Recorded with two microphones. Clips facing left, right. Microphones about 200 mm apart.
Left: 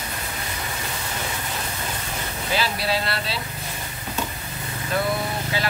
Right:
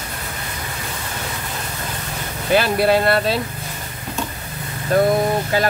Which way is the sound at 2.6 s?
55° right (ahead or behind).